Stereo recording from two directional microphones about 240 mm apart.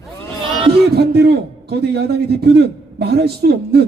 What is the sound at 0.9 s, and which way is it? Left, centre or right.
A man's voice, right.